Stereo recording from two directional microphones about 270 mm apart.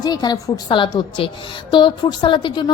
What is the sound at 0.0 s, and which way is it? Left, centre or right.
A woman's voice, centre.